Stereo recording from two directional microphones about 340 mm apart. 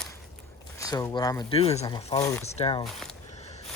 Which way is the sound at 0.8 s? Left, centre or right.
Centre.